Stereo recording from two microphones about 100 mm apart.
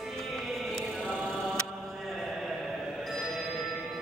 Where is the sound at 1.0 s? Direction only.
5° right (ahead or behind).